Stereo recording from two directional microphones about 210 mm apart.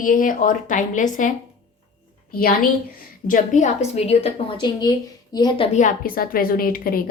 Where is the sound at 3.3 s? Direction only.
35° left (ahead or behind); by 5.6 s 20° left (ahead or behind).